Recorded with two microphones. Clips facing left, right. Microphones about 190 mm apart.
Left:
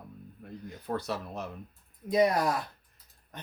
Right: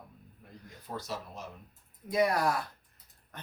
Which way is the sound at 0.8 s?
60° left (ahead or behind).